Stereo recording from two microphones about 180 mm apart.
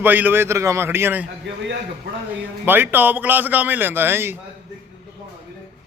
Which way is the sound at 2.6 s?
10° right (ahead or behind).